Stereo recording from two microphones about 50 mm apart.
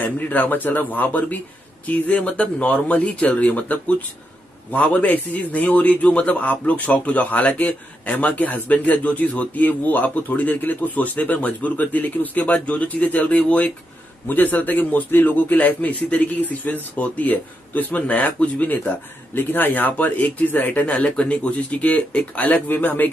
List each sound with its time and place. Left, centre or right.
0.0 s a man's voice: left